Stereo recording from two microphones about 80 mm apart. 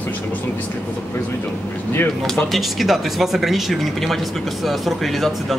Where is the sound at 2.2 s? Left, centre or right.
Centre.